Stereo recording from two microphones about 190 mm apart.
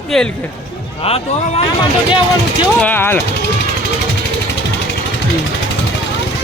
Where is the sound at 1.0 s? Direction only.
30° left (ahead or behind).